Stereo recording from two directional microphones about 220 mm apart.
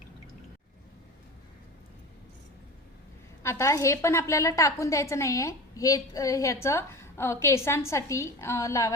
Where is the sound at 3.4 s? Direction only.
10° left (ahead or behind).